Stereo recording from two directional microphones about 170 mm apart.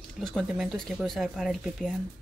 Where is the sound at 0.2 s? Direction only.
Centre (ahead or behind).